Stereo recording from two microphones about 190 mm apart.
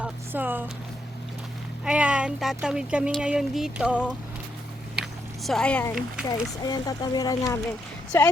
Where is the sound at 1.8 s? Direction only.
5° right (ahead or behind).